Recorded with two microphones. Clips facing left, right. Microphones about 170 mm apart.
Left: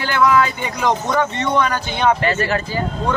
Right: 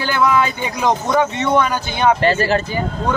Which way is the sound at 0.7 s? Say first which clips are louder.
Right 2 dB; 15° right (ahead or behind).